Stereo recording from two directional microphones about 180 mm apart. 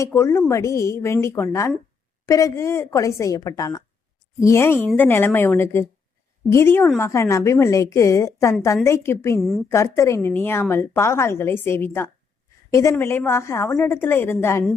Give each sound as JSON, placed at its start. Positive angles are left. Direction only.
{"t": 0.0, "sound": "a woman's voice", "side_deg": 15}